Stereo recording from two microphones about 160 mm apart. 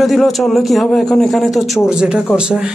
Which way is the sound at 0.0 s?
Centre (ahead or behind).